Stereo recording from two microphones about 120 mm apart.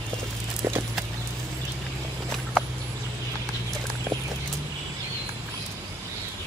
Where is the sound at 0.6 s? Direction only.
20° right (ahead or behind).